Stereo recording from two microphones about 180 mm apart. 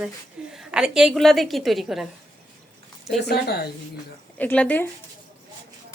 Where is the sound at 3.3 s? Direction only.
60° left (ahead or behind).